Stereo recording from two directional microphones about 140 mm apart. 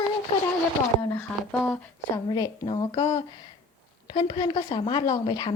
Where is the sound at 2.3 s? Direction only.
30° left (ahead or behind).